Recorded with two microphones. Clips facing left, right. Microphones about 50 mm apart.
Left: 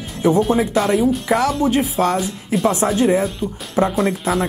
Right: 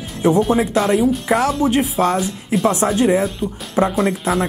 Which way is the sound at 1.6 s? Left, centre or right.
Right.